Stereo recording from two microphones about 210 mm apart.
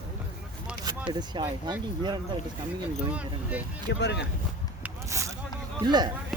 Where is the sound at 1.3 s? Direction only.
20° right (ahead or behind).